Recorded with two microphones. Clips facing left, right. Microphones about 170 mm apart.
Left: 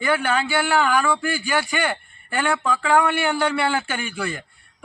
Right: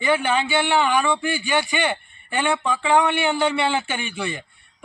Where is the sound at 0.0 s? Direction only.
20° right (ahead or behind).